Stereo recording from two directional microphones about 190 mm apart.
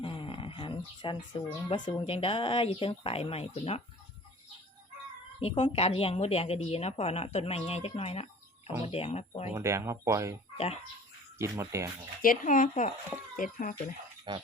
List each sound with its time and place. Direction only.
0.0 s a sound: 25° left (ahead or behind)
1.6 s speech: 25° left (ahead or behind)
5.4 s a woman's voice: 30° left (ahead or behind)
9.6 s speech: 15° right (ahead or behind)
11.3 s speech: 15° right (ahead or behind)
12.2 s speech: 45° left (ahead or behind)
14.3 s speech: 25° right (ahead or behind)